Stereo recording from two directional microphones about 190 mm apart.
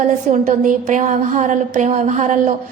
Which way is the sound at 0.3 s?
40° right (ahead or behind).